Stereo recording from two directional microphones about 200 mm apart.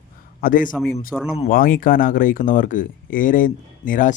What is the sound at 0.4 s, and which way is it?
Speech, 45° left (ahead or behind).